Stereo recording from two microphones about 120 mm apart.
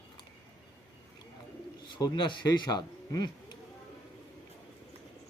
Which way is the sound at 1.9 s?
35° left (ahead or behind).